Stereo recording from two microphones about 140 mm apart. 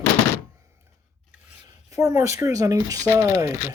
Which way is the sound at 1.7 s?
20° right (ahead or behind).